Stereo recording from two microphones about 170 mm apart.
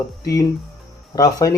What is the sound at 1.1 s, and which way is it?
Speech, 20° left (ahead or behind).